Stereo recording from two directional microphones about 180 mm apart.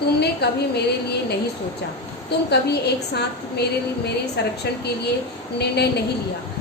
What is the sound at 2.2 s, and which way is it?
A woman's voice, 65° left (ahead or behind).